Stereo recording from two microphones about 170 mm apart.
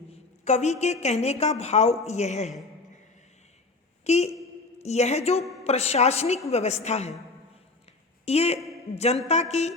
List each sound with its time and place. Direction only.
0.1 s speech: 40° left (ahead or behind)
4.0 s speech: 40° left (ahead or behind)
8.2 s a woman's voice: 35° left (ahead or behind)